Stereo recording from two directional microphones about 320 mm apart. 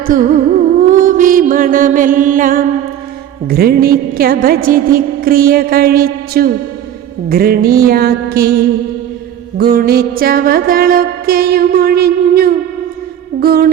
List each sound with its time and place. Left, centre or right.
0.1 s music: right
0.8 s mantra: right
3.4 s music: right
9.6 s music: right